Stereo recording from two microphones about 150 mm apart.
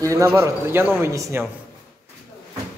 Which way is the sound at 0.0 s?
20° right (ahead or behind).